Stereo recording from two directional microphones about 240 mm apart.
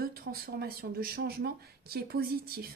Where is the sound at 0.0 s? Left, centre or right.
Right.